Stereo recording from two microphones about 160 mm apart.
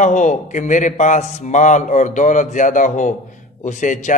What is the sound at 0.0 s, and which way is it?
A man's voice, 50° left (ahead or behind).